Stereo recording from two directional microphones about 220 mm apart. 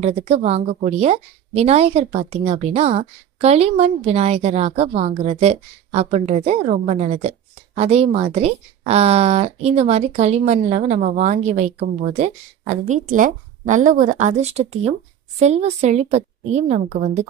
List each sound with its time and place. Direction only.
0.0 s speech: 30° right (ahead or behind)